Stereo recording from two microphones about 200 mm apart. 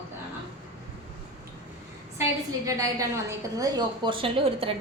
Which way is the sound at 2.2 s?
15° right (ahead or behind).